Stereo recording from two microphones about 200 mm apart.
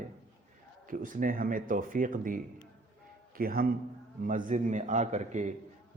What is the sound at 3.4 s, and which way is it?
A man's voice, 45° right (ahead or behind).